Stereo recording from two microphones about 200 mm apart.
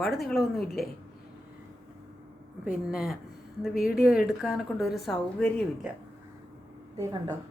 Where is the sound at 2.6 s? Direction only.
45° left (ahead or behind).